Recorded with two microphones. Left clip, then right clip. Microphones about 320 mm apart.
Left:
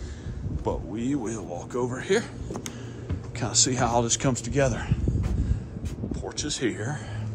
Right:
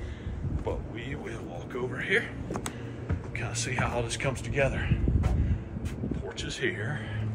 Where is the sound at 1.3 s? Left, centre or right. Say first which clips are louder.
Left 5 dB; centre.